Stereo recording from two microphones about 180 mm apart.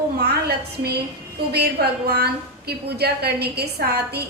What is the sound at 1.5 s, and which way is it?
A woman's voice, 65° right (ahead or behind).